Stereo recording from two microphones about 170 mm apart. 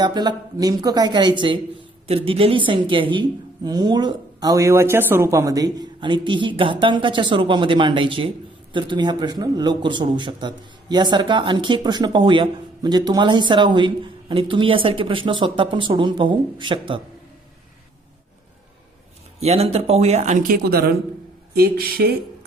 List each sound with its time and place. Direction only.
0.0 s a man's voice: 25° right (ahead or behind)
19.4 s speech: 35° right (ahead or behind)
20.7 s speech: 65° right (ahead or behind)